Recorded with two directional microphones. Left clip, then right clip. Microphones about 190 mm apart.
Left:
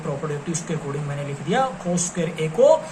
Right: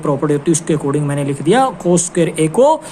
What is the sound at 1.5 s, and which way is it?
A woman's voice, 70° right (ahead or behind).